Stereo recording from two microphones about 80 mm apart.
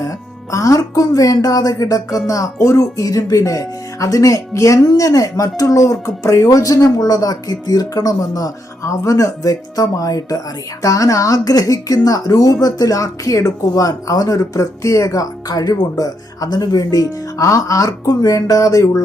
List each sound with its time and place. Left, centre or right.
0.5 s speech: left